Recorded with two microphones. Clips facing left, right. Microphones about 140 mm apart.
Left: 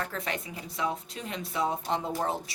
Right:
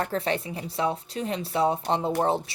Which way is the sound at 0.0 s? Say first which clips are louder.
Right 7 dB; 30° right (ahead or behind).